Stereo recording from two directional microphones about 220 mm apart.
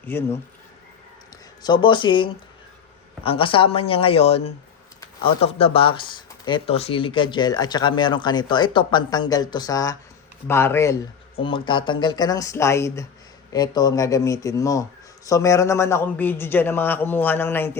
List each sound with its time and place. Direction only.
0.1 s a man's voice: 10° left (ahead or behind)
1.6 s a man's voice: 20° left (ahead or behind)